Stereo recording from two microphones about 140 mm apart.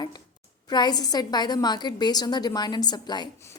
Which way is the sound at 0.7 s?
30° left (ahead or behind).